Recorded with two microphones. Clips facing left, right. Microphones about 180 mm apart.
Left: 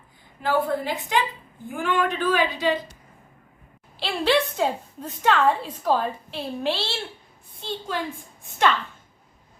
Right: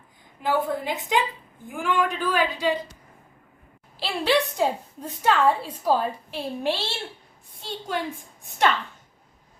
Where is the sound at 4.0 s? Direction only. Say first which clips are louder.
Left 1 dB; 10° right (ahead or behind).